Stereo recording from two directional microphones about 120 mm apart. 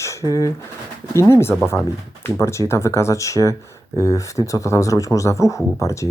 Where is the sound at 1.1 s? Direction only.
25° left (ahead or behind).